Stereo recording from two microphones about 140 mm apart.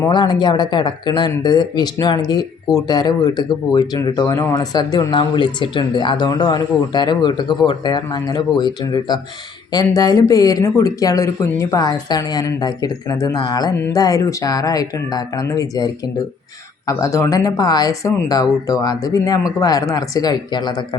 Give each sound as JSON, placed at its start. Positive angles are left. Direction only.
{"t": 0.1, "sound": "speech", "side_deg": 30}